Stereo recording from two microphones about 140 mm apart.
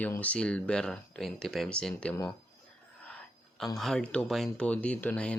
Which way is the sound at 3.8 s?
5° left (ahead or behind).